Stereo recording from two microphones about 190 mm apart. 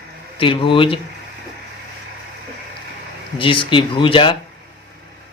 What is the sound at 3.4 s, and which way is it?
A man's voice, 25° left (ahead or behind).